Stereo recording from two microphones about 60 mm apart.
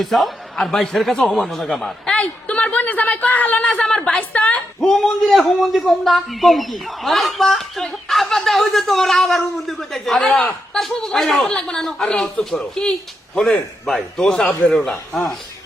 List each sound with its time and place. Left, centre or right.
0.0 s a man's voice: centre
2.1 s a woman's voice: centre
4.2 s a woman's voice: left
4.8 s a man's voice: centre
10.2 s a man's voice: centre